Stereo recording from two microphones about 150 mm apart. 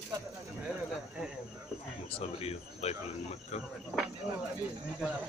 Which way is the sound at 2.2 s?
40° left (ahead or behind).